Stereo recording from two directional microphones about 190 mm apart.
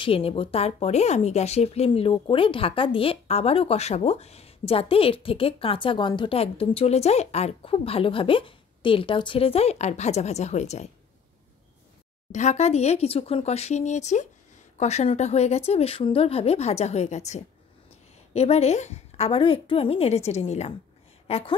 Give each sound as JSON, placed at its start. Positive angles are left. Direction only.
{"t": 0.0, "sound": "a woman's voice", "side_deg": 30}
{"t": 12.3, "sound": "a woman's voice", "side_deg": 35}